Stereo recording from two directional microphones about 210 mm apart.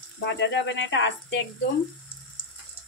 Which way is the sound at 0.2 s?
55° left (ahead or behind).